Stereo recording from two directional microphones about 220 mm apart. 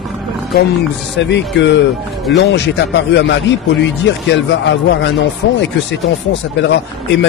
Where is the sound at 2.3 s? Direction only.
50° left (ahead or behind).